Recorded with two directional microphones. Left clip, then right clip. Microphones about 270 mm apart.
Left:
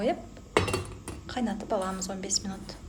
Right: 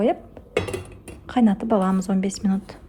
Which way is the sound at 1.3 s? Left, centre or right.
Right.